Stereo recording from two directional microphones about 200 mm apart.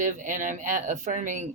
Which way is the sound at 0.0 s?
40° right (ahead or behind).